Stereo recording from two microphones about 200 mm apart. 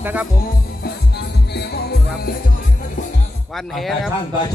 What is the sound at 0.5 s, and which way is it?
Music, 55° left (ahead or behind).